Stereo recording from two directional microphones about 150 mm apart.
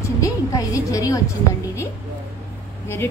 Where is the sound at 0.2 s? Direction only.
20° left (ahead or behind).